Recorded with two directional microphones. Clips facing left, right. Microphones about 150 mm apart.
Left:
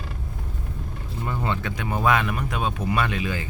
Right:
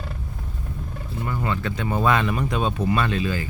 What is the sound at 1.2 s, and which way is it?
Speech, 20° left (ahead or behind).